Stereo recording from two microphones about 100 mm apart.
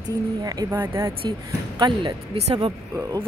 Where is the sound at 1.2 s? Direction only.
45° right (ahead or behind).